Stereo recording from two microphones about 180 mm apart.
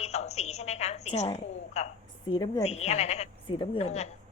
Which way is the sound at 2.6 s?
35° left (ahead or behind).